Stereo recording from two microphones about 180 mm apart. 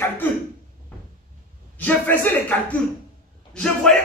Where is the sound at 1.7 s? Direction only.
10° left (ahead or behind).